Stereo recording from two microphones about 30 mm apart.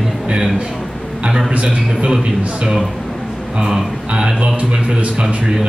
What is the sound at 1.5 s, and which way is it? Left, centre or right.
Speech, right.